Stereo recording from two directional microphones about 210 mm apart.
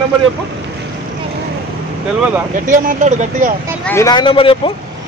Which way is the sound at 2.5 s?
35° right (ahead or behind).